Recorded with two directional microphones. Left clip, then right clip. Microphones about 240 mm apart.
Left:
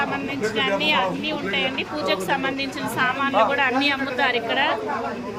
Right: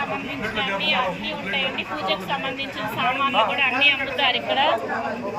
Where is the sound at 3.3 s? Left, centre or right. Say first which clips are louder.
Left 3 dB; left.